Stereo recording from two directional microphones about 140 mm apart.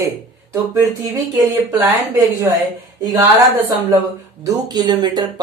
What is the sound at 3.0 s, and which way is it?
Speech, 25° right (ahead or behind).